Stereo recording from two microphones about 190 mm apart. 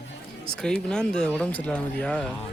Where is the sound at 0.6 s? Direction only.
5° left (ahead or behind).